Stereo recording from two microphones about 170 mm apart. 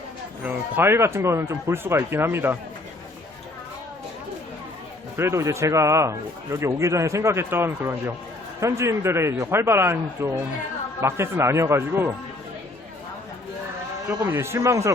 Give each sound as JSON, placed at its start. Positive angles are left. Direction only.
{"t": 0.4, "sound": "speech", "side_deg": -15}
{"t": 5.1, "sound": "speech", "side_deg": -15}
{"t": 14.1, "sound": "speech", "side_deg": -10}